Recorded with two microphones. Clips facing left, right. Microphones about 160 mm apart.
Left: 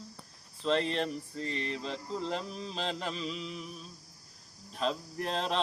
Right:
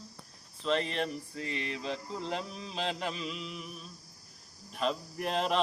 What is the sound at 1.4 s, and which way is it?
Mantra, 35° left (ahead or behind).